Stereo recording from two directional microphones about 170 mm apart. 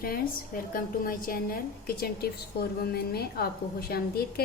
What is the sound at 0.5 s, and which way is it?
A woman's voice, 55° left (ahead or behind).